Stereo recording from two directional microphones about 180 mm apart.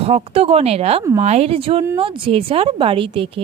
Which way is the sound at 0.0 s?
35° right (ahead or behind).